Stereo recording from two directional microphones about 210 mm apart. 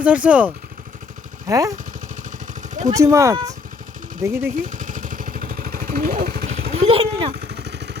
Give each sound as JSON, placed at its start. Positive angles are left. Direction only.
{"t": 0.0, "sound": "speech", "side_deg": -5}
{"t": 2.7, "sound": "speech", "side_deg": -35}
{"t": 3.0, "sound": "speech", "side_deg": -15}
{"t": 4.6, "sound": "vehicle", "side_deg": -35}
{"t": 6.7, "sound": "a sound", "side_deg": -25}
{"t": 7.4, "sound": "vehicle", "side_deg": -55}